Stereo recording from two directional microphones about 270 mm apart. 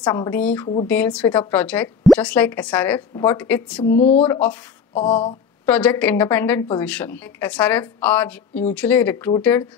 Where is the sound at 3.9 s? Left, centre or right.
Left.